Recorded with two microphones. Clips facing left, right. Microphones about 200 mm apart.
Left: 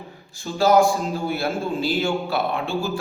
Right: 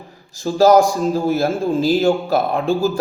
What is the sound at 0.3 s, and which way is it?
A man's voice, 40° right (ahead or behind).